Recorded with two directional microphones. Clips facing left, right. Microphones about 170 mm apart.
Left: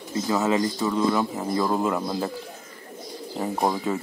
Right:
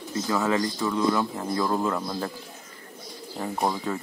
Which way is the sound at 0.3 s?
20° left (ahead or behind).